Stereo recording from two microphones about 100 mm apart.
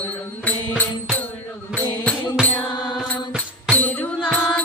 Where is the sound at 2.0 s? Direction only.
10° left (ahead or behind).